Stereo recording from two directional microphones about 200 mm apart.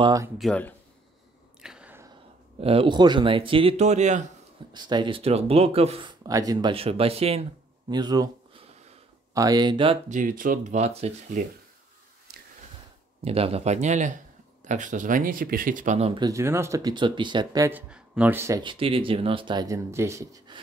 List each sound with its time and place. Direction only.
0.0 s speech: 15° right (ahead or behind)
0.4 s speech: 5° left (ahead or behind)
1.6 s a sound: 5° right (ahead or behind)
2.6 s speech: 30° right (ahead or behind)
4.7 s speech: 20° right (ahead or behind)
6.2 s speech: 20° right (ahead or behind)
12.3 s a sound: 50° right (ahead or behind)
13.2 s speech: 30° right (ahead or behind)
16.1 s speech: 20° right (ahead or behind)
18.6 s speech: 25° right (ahead or behind)